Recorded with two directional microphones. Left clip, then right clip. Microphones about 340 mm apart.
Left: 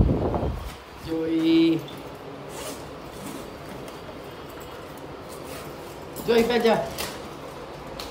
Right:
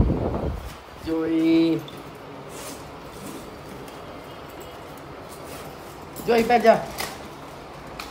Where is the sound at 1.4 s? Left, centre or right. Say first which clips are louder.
Even; centre.